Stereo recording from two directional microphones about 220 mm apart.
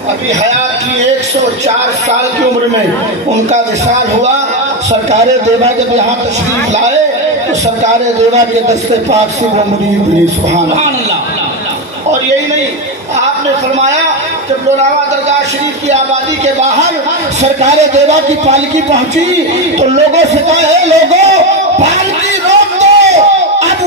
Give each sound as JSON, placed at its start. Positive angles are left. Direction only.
{"t": 5.1, "sound": "a man's voice", "side_deg": -30}
{"t": 7.8, "sound": "a man's voice", "side_deg": -30}
{"t": 16.6, "sound": "a man's voice", "side_deg": -30}
{"t": 22.5, "sound": "a sound", "side_deg": -30}